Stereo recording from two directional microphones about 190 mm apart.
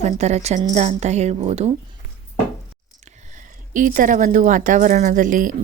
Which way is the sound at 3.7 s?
45° right (ahead or behind).